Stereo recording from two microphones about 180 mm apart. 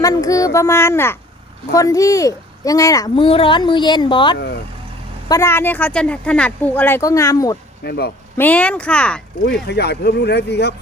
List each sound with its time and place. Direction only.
0.0 s speech: 20° left (ahead or behind)
3.2 s speech: 30° left (ahead or behind)
4.4 s speech: 65° left (ahead or behind)
5.3 s speech: 15° left (ahead or behind)
7.9 s speech: 65° left (ahead or behind)
8.4 s speech: 10° left (ahead or behind)
9.4 s speech: 65° left (ahead or behind)